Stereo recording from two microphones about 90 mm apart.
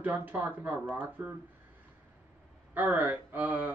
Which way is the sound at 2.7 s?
20° right (ahead or behind).